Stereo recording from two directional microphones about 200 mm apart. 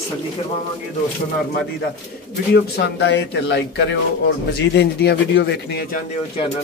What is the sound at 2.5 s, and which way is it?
Speech, 60° left (ahead or behind).